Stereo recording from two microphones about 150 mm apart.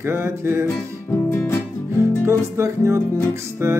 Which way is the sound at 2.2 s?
20° right (ahead or behind).